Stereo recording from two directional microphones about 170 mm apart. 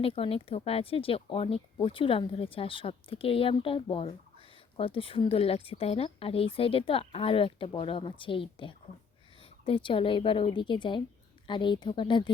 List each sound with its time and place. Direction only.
0.0 s a woman's voice: 35° left (ahead or behind)